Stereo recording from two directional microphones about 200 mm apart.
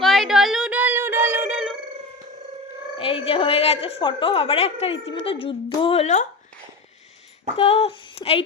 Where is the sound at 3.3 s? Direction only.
30° left (ahead or behind).